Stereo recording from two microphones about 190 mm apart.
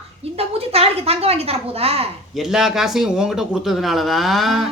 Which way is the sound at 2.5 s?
Centre (ahead or behind).